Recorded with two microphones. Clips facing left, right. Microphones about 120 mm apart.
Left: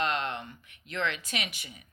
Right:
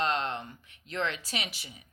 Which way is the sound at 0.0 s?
35° right (ahead or behind).